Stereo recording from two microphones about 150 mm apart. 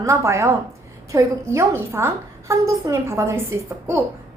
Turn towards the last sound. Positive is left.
turn(degrees=-15)  # may be behind; listen again after turning